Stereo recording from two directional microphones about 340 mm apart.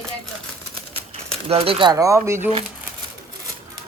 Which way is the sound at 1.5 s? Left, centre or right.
Centre.